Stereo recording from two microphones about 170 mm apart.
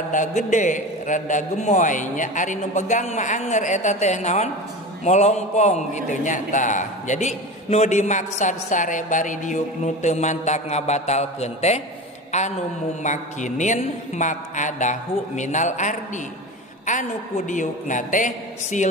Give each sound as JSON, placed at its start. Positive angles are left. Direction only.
{"t": 0.1, "sound": "a man's voice", "side_deg": 45}
{"t": 17.5, "sound": "a man's voice", "side_deg": 50}